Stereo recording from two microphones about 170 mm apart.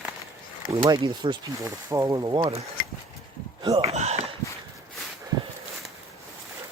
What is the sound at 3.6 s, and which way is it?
Speech, 35° right (ahead or behind).